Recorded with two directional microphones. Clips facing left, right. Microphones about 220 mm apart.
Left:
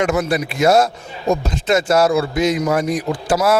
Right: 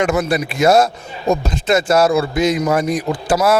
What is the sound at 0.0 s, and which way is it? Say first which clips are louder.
Speech: right 1 dB; 25° right (ahead or behind).